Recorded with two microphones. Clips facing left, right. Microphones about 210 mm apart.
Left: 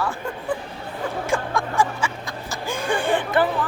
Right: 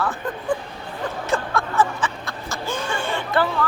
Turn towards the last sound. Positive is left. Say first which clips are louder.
# left 1 dB
turn(degrees=20)  # may be behind; listen again after turning